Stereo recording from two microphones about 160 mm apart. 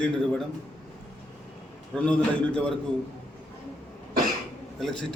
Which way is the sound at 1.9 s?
5° left (ahead or behind).